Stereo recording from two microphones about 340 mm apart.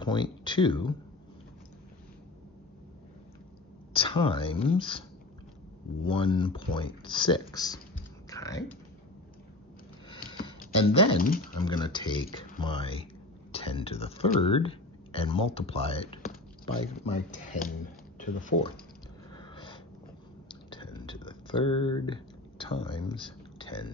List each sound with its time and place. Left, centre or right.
0.0 s speech: centre
3.9 s speech: centre
6.0 s speech: centre
8.3 s typing: centre
10.4 s speech: centre
19.3 s sniff: centre
20.7 s a sound: centre